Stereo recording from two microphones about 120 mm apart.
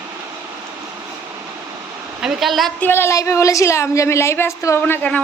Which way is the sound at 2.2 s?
5° right (ahead or behind).